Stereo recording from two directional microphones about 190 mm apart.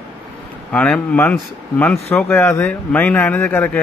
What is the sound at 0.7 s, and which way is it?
A man's voice, 5° left (ahead or behind).